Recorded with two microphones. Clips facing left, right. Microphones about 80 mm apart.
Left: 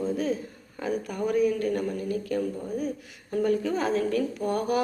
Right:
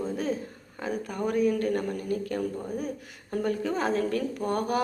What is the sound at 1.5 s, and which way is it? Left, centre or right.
Speech, right.